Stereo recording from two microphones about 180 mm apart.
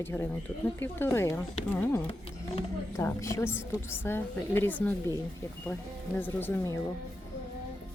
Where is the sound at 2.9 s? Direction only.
15° left (ahead or behind).